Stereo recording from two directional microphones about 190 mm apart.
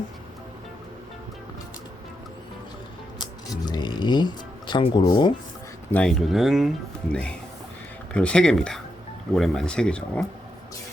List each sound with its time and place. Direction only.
3.2 s music: 20° left (ahead or behind)
5.9 s speech: 5° left (ahead or behind)